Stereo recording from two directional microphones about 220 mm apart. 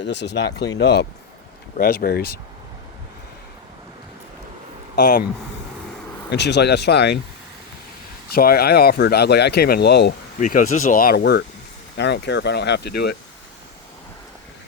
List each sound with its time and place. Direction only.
0.0 s speech: 50° left (ahead or behind)
0.5 s speech: 15° left (ahead or behind)
0.8 s speech: 50° left (ahead or behind)
6.3 s speech: 50° left (ahead or behind)
8.3 s speech: 45° left (ahead or behind)
10.4 s speech: 35° left (ahead or behind)